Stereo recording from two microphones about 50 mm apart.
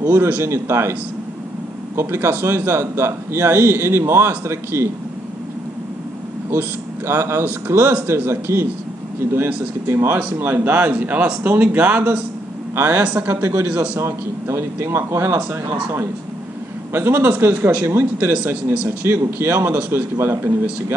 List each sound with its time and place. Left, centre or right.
0.0 s a man's voice: right
2.0 s a man's voice: right
7.1 s a man's voice: right
12.7 s a man's voice: right
16.9 s a man's voice: right
18.3 s speech: right
18.9 s a man's voice: right